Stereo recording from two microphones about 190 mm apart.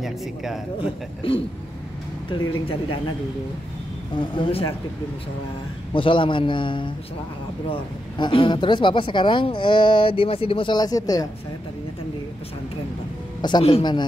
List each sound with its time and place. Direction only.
0.0 s speech: centre (ahead or behind)
0.7 s speech: 30° left (ahead or behind)
4.1 s speech: 25° left (ahead or behind)
5.9 s speech: 25° left (ahead or behind)
13.4 s speech: 25° left (ahead or behind)